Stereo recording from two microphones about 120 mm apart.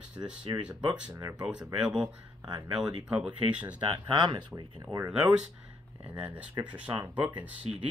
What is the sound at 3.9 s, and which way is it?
Speech, 40° right (ahead or behind).